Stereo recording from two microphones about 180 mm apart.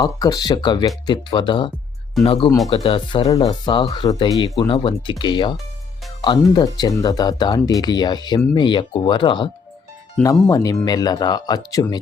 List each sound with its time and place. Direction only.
0.0 s speech: 20° left (ahead or behind)
10.2 s speech: 5° left (ahead or behind)
10.5 s speech: 20° left (ahead or behind)